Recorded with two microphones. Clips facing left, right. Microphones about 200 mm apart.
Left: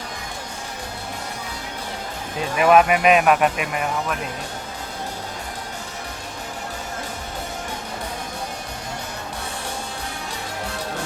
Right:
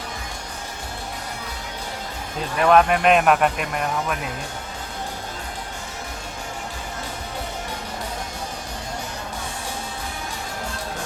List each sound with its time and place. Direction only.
2.6 s speech: 5° left (ahead or behind)